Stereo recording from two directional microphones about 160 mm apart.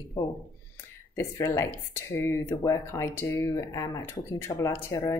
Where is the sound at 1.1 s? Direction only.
15° left (ahead or behind).